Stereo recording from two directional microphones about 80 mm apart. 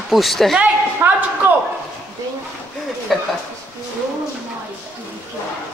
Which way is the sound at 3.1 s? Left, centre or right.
Centre.